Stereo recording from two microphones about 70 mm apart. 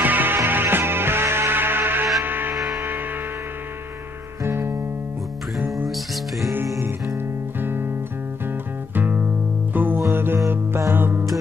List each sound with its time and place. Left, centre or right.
0.0 s music: right
2.5 s music: centre
4.5 s music: right
8.9 s music: right